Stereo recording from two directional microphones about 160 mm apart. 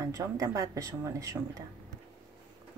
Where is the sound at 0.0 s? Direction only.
20° right (ahead or behind).